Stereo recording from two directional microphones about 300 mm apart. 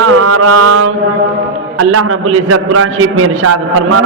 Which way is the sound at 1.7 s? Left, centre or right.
Right.